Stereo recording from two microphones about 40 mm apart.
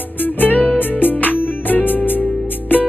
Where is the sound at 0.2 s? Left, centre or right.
Left.